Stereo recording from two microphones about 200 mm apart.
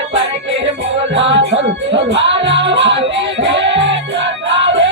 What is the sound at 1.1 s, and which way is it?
Music, 65° right (ahead or behind).